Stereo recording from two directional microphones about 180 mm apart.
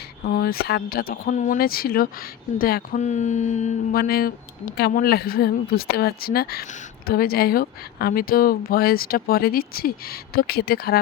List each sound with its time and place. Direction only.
0.3 s speech: 55° left (ahead or behind)
3.0 s music: 40° left (ahead or behind)
3.9 s speech: 55° left (ahead or behind)